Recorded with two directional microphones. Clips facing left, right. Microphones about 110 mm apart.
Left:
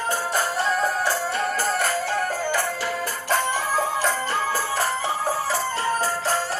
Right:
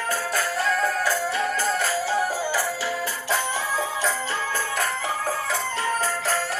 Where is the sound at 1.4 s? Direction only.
45° left (ahead or behind).